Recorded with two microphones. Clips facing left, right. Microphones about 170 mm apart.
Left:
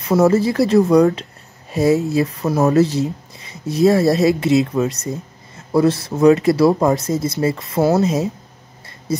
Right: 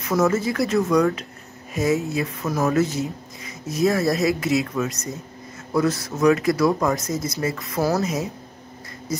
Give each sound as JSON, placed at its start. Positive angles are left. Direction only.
{"t": 0.0, "sound": "speech", "side_deg": 30}